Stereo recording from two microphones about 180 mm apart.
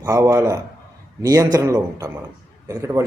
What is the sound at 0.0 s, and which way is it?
A man's voice, 20° right (ahead or behind).